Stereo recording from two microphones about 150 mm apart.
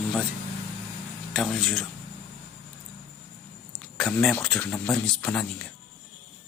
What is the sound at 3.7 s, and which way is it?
A man's voice, centre (ahead or behind).